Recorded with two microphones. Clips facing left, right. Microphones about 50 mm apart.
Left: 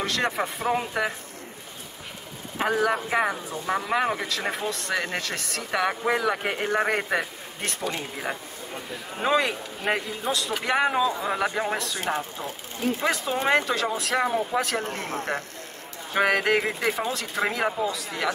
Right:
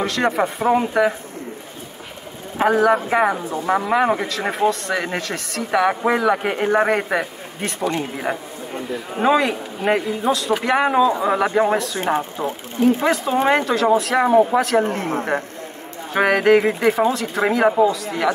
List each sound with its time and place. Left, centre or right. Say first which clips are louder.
0.0 s speech: right 7 dB; centre
2.6 s speech: right 8 dB; centre
3.3 s speech: right 8 dB; right
3.7 s speech: right 7 dB; centre
9.2 s speech: right 6 dB; centre
11.1 s speech: right 8 dB; centre
12.8 s speech: right 8 dB; centre
14.8 s speech: right 10 dB; right
16.1 s speech: right 7 dB; centre